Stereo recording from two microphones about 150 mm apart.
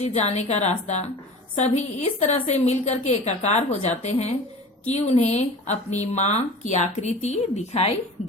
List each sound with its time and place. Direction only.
0.0 s speech: 45° left (ahead or behind)